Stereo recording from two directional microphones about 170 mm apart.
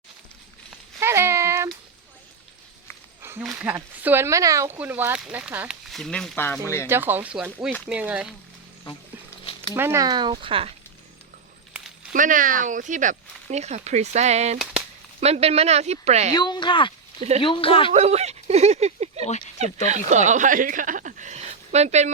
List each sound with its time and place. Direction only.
0.9 s a sound: 15° right (ahead or behind)
3.4 s speech: 10° right (ahead or behind); by 6.6 s 10° left (ahead or behind)
6.8 s speech: 15° right (ahead or behind)
9.4 s a sound: 30° left (ahead or behind)
9.7 s speech: 15° right (ahead or behind); by 10.7 s 30° right (ahead or behind)
12.1 s speech: 50° right (ahead or behind)
14.6 s a sound: 5° right (ahead or behind)
15.2 s speech: 35° right (ahead or behind)
16.3 s speech: 25° left (ahead or behind)
17.2 s speech: 40° right (ahead or behind)
17.4 s speech: 30° left (ahead or behind)
17.9 s speech: 40° right (ahead or behind)